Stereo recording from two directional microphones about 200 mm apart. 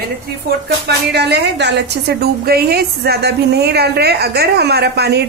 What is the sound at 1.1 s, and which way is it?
A woman's voice, 55° right (ahead or behind).